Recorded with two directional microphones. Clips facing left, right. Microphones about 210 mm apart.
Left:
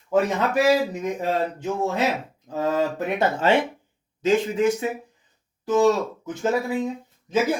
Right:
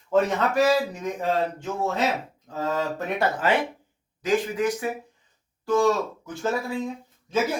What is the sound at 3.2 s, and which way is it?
Speech, 25° left (ahead or behind).